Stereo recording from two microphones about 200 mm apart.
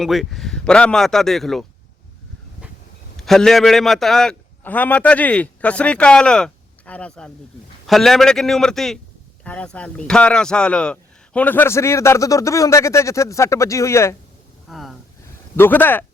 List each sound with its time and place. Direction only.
0.0 s a man's voice: centre (ahead or behind)
3.2 s a man's voice: centre (ahead or behind)
14.7 s a sound: centre (ahead or behind)
15.5 s a man's voice: 10° left (ahead or behind)